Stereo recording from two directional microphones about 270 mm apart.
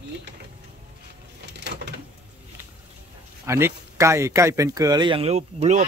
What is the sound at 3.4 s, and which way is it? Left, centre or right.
A man's voice, centre.